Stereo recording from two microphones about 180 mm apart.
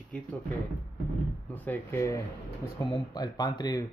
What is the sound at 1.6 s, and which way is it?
Speech, 15° left (ahead or behind).